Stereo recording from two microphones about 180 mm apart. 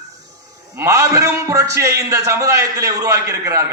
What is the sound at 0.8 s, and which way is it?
A man's voice, 15° right (ahead or behind).